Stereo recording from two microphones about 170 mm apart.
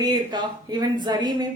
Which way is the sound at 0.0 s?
25° right (ahead or behind).